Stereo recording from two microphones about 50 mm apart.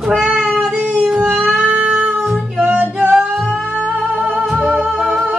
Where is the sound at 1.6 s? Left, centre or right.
Right.